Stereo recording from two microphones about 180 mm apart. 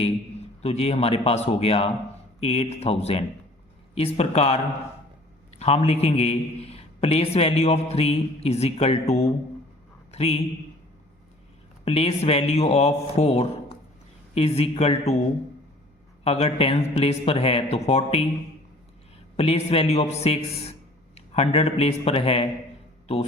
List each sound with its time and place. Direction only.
0.6 s a man's voice: 35° left (ahead or behind)
11.9 s a man's voice: 35° left (ahead or behind)
16.2 s a man's voice: 35° left (ahead or behind)
19.4 s a man's voice: 35° left (ahead or behind)